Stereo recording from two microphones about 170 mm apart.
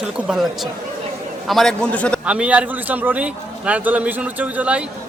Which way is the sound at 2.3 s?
5° right (ahead or behind).